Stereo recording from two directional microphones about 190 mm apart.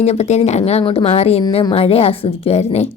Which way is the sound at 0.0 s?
35° left (ahead or behind).